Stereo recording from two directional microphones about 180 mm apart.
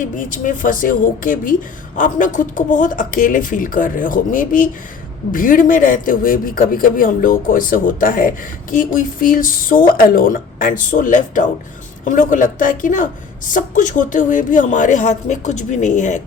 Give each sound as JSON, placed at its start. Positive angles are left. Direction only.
{"t": 0.2, "sound": "a woman's voice", "side_deg": 45}